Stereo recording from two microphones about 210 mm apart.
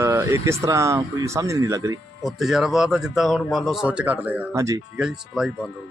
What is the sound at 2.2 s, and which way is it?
Speech, centre (ahead or behind).